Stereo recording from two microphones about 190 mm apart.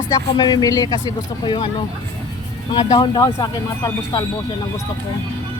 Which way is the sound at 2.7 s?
25° left (ahead or behind).